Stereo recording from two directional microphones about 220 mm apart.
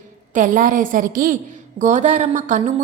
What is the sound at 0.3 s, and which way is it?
A woman's voice, 35° right (ahead or behind).